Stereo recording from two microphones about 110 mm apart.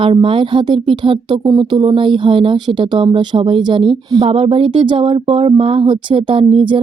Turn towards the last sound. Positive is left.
turn(degrees=-50)  # may be behind; listen again after turning